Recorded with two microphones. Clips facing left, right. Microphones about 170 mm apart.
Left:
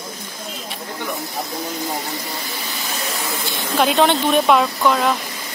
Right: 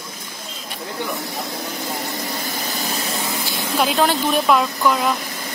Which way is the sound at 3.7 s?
Centre (ahead or behind).